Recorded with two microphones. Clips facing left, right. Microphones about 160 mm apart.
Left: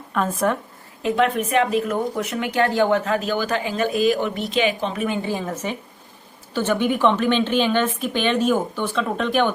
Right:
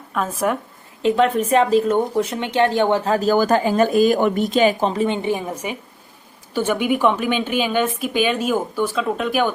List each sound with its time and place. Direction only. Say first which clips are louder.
0.1 s a woman's voice: even; 5° right (ahead or behind)
1.1 s a woman's voice: right 2 dB; 35° right (ahead or behind); by 9.5 s 5° right (ahead or behind)